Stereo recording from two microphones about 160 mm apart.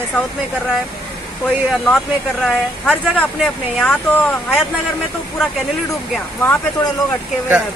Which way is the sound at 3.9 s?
10° left (ahead or behind).